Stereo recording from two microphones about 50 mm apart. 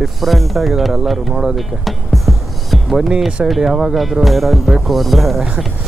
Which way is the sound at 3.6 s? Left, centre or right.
Centre.